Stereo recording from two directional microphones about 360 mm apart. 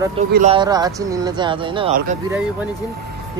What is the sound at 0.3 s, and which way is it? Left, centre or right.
A man's voice, centre.